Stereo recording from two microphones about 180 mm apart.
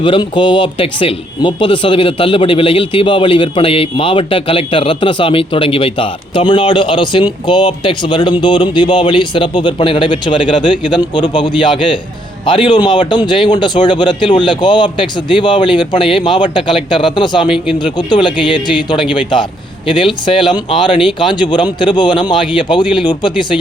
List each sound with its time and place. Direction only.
0.0 s speech: 25° left (ahead or behind)